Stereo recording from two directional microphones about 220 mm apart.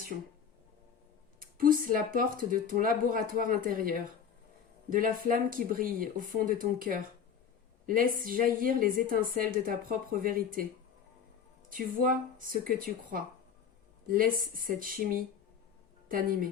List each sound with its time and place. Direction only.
1.4 s a woman's voice: 40° right (ahead or behind)
11.7 s a woman's voice: 40° right (ahead or behind)